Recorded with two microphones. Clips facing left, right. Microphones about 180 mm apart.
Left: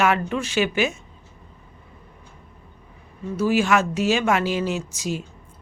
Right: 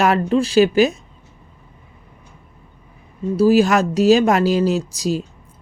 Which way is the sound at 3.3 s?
35° right (ahead or behind).